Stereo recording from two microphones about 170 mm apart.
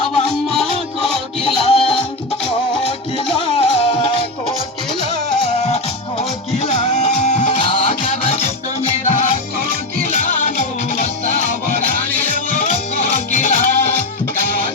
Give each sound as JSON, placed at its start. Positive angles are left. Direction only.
{"t": 0.1, "sound": "music", "side_deg": 0}
{"t": 1.0, "sound": "music", "side_deg": 35}
{"t": 3.2, "sound": "music", "side_deg": 30}
{"t": 6.5, "sound": "music", "side_deg": 40}
{"t": 13.0, "sound": "music", "side_deg": 50}